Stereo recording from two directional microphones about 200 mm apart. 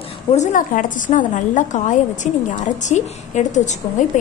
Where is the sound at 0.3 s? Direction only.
40° left (ahead or behind).